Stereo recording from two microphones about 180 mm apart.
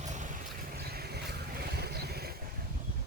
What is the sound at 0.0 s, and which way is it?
Boat, 40° right (ahead or behind).